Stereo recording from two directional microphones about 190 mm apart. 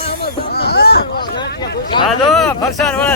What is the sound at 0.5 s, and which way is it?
Hubbub, 55° left (ahead or behind).